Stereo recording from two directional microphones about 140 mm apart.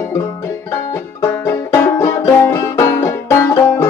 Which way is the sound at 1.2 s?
20° left (ahead or behind).